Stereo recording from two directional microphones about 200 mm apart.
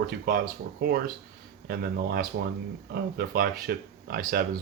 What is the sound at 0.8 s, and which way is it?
Speech, 50° right (ahead or behind).